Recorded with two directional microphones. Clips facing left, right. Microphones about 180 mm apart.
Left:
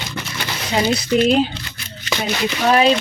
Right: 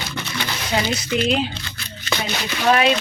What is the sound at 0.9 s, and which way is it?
Speech, 40° left (ahead or behind).